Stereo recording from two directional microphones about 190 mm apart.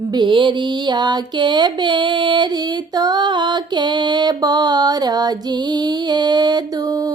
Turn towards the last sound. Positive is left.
turn(degrees=-20)  # may be behind; listen again after turning